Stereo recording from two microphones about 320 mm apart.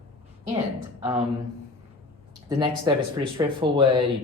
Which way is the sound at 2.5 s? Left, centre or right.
Centre.